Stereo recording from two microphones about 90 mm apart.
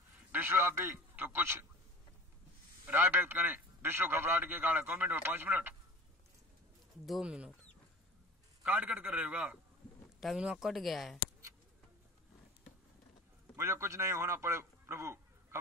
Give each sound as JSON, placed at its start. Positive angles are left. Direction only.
{"t": 0.3, "sound": "a man's voice", "side_deg": -20}
{"t": 2.9, "sound": "a man's voice", "side_deg": -20}
{"t": 7.1, "sound": "speech", "side_deg": -10}
{"t": 8.6, "sound": "a man's voice", "side_deg": -20}
{"t": 10.2, "sound": "speech", "side_deg": -5}
{"t": 13.6, "sound": "a man's voice", "side_deg": -30}